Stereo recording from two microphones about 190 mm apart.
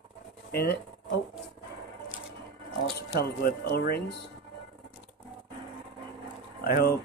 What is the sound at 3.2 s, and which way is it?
Speech, 55° left (ahead or behind).